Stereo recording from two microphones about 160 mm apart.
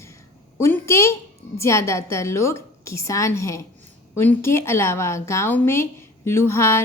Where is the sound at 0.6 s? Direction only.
15° left (ahead or behind).